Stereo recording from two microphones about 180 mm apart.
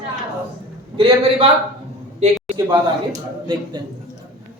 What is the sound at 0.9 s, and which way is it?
Speech, 30° right (ahead or behind).